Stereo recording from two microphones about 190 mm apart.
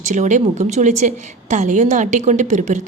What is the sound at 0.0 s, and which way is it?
A woman's voice, 40° right (ahead or behind).